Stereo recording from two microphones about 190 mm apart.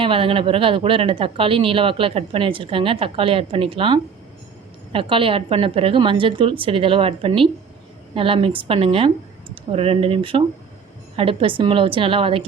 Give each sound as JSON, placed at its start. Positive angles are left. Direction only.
{"t": 0.0, "sound": "speech", "side_deg": -30}